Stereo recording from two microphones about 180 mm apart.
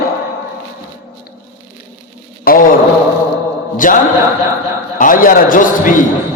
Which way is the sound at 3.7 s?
50° left (ahead or behind).